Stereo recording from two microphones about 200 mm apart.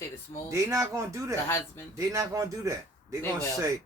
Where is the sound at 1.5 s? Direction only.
15° left (ahead or behind).